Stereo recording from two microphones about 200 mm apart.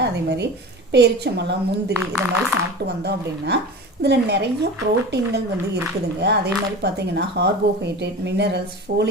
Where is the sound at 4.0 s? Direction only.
55° right (ahead or behind).